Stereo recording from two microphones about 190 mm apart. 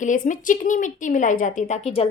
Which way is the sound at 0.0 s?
40° left (ahead or behind).